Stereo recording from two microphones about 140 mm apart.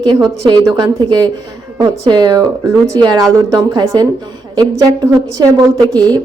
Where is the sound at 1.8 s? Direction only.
30° right (ahead or behind).